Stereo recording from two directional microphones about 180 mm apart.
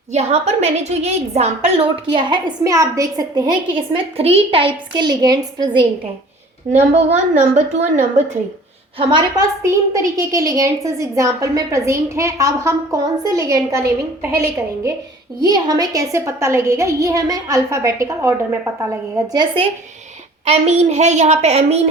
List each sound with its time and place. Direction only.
0.1 s a woman's voice: 35° right (ahead or behind)
6.7 s a woman's voice: 45° right (ahead or behind)
9.0 s a woman's voice: 25° right (ahead or behind)
20.4 s a woman's voice: 35° right (ahead or behind)